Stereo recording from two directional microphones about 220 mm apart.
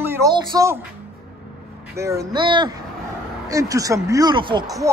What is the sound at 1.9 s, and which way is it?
Speech, 15° right (ahead or behind).